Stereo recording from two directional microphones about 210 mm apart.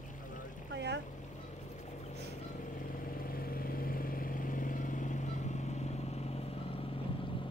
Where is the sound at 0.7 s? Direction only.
55° right (ahead or behind).